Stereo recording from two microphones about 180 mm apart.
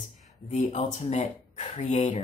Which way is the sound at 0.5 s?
40° left (ahead or behind).